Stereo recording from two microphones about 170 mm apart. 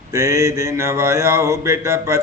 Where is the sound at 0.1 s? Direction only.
15° right (ahead or behind).